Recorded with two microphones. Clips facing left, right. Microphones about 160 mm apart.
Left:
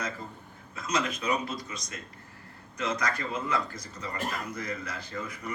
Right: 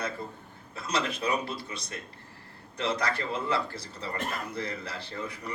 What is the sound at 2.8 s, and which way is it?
A man's voice, 30° right (ahead or behind).